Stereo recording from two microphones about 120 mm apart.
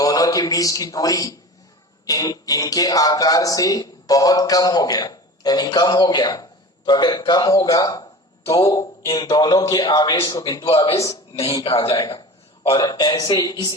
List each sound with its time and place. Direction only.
0.0 s a man's voice: 30° left (ahead or behind)
11.3 s speech: 50° left (ahead or behind)
11.9 s speech: 35° left (ahead or behind)